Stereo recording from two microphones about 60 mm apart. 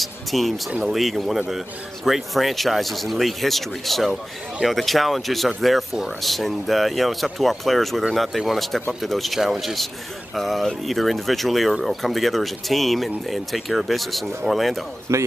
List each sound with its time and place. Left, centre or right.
0.0 s speech: centre
15.1 s speech: right